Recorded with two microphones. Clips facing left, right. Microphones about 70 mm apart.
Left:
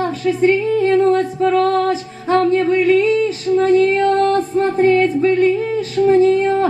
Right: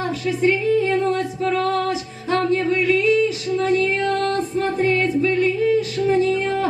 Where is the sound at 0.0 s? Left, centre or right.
Left.